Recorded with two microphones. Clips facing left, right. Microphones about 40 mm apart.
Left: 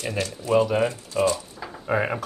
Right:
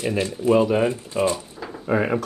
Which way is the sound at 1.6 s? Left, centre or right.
Centre.